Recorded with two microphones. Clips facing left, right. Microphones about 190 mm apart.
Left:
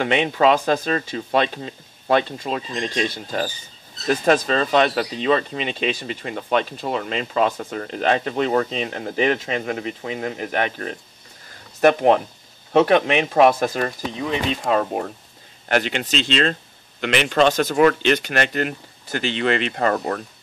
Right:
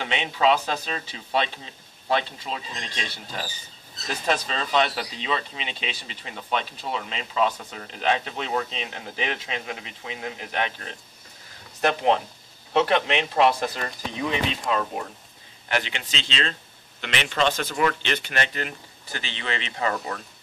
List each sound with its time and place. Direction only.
0.0 s speech: 50° left (ahead or behind)
15.7 s speech: 45° left (ahead or behind)